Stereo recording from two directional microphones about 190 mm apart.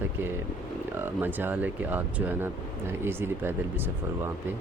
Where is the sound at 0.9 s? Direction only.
10° right (ahead or behind).